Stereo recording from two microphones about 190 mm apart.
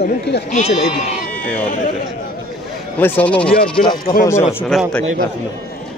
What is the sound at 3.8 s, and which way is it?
Speech, 45° left (ahead or behind).